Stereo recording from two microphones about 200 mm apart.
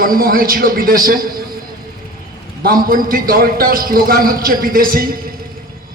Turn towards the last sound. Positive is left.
turn(degrees=-45)  # may be behind; listen again after turning